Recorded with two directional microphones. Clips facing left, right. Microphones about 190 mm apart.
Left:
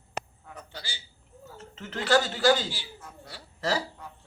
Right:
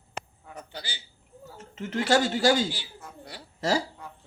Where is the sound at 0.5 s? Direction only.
20° right (ahead or behind).